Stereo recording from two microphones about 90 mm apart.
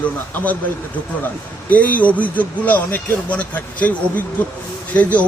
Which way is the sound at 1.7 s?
15° left (ahead or behind).